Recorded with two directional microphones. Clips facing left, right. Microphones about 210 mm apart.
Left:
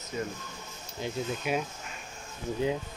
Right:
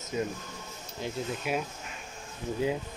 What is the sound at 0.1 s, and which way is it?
Speech, 20° right (ahead or behind).